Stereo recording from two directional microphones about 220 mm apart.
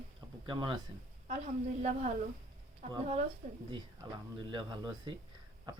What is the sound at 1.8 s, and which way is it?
Speech, 30° right (ahead or behind).